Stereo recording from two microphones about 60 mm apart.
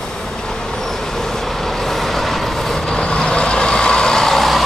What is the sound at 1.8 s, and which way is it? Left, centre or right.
Vehicle, centre.